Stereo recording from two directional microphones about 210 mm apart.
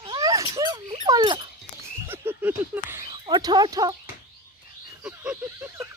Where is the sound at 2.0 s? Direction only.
10° right (ahead or behind).